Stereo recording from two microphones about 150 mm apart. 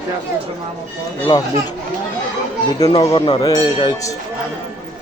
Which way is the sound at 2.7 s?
30° left (ahead or behind).